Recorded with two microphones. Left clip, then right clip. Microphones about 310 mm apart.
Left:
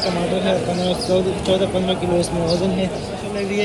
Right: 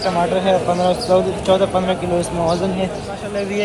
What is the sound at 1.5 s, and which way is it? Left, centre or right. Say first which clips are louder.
Speech: right 4 dB; centre.